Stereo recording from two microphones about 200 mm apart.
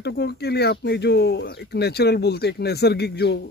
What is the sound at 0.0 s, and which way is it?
Speech, 55° left (ahead or behind).